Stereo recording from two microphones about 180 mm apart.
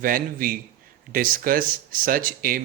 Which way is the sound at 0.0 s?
50° right (ahead or behind).